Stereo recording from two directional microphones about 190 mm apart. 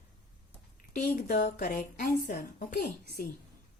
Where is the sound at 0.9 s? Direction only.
45° left (ahead or behind).